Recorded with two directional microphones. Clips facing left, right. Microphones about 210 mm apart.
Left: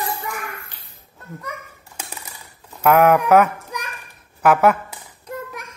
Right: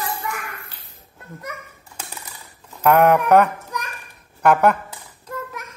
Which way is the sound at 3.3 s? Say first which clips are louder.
Even; 5° left (ahead or behind).